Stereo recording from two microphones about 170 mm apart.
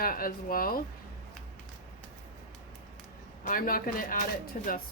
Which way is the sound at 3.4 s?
60° left (ahead or behind).